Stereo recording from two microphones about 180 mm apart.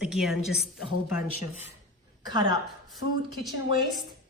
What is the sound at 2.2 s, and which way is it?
Speech, 25° right (ahead or behind).